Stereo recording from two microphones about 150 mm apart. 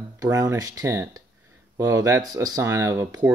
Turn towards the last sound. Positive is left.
turn(degrees=-20)  # may be behind; listen again after turning